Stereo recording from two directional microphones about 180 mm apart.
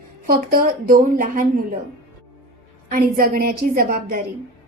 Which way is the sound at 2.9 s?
55° right (ahead or behind).